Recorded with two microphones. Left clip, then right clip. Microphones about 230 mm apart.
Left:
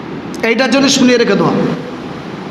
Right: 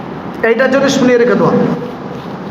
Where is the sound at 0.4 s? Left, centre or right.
Left.